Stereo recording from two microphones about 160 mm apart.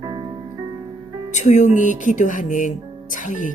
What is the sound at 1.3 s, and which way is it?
Speech, 50° left (ahead or behind).